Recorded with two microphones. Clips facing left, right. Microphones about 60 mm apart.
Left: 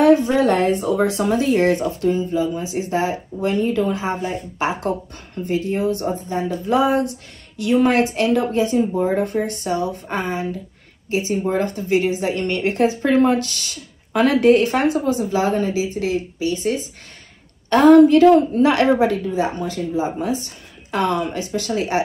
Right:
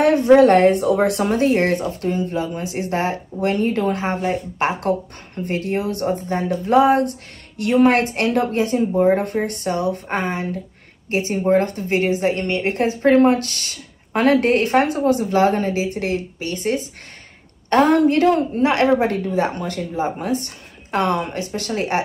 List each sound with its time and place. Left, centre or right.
0.0 s a woman's voice: right
12.4 s speech: right
18.9 s speech: right